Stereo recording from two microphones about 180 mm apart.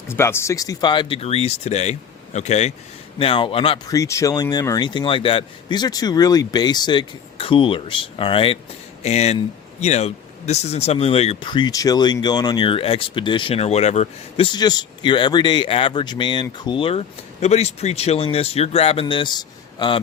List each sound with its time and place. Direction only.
0.1 s speech: 15° left (ahead or behind); by 3.9 s 30° left (ahead or behind)
3.9 s speech: 20° left (ahead or behind)